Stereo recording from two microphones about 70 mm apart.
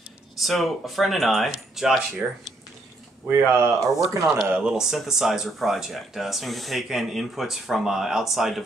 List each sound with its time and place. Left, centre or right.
0.4 s speech: centre
3.3 s speech: right
3.8 s speech: right
4.6 s speech: centre